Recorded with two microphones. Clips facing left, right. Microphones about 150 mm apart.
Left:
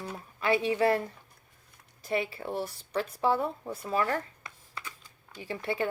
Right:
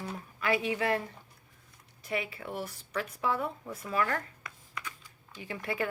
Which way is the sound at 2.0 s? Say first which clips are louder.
Left 4 dB; 35° left (ahead or behind).